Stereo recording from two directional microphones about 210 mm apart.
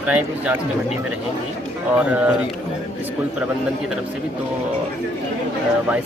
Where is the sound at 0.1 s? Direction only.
5° right (ahead or behind).